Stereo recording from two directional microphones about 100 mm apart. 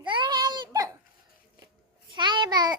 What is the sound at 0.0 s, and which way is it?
Baby cry, 50° right (ahead or behind).